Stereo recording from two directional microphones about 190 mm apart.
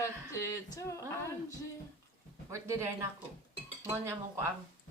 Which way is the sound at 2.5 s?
15° right (ahead or behind).